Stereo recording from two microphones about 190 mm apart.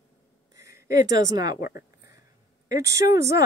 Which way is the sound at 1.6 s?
55° left (ahead or behind).